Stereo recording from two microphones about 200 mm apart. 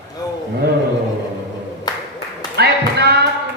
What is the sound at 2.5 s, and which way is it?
Speech, 55° right (ahead or behind).